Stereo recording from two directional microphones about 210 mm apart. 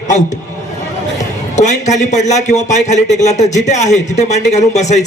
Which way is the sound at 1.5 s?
35° left (ahead or behind).